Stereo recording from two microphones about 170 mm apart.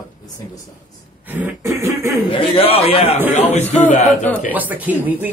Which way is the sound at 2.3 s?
30° left (ahead or behind).